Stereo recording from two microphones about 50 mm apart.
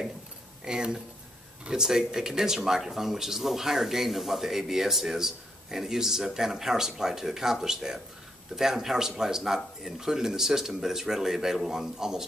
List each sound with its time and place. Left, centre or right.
0.7 s speech: centre